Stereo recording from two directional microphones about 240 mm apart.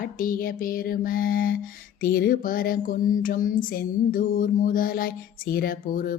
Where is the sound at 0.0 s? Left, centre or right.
Left.